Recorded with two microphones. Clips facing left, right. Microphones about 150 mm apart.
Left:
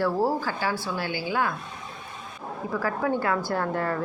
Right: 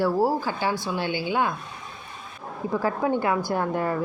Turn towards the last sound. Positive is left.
turn(degrees=-15)  # may be behind; listen again after turning